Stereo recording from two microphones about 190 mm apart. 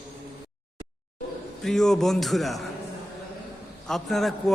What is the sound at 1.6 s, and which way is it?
A man's voice, centre (ahead or behind).